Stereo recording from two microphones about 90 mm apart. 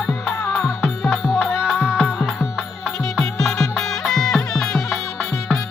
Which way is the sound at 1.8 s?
20° left (ahead or behind).